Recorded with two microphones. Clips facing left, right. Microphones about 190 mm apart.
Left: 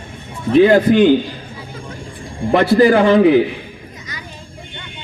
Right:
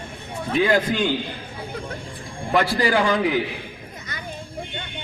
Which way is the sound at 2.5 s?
25° left (ahead or behind).